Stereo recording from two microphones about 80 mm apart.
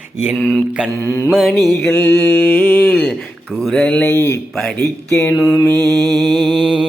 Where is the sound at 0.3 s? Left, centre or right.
Centre.